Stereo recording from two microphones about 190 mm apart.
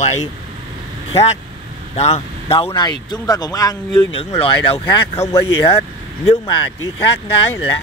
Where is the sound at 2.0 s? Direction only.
35° left (ahead or behind).